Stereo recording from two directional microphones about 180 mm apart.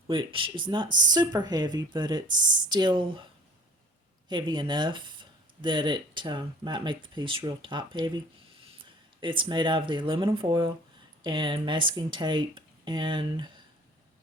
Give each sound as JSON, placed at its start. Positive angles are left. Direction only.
{"t": 0.1, "sound": "speech", "side_deg": -30}
{"t": 4.3, "sound": "speech", "side_deg": -25}